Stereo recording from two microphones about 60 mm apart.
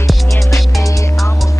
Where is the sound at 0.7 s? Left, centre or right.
Left.